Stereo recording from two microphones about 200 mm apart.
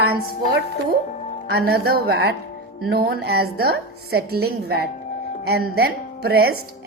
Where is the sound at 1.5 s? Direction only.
55° right (ahead or behind).